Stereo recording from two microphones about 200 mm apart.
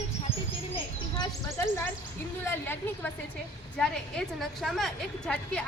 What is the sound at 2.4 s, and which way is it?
A woman's voice, 10° left (ahead or behind).